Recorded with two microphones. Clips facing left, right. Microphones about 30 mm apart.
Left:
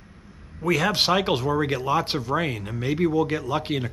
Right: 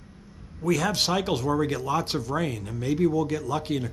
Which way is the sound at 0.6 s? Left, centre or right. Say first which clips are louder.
Left 3 dB; left.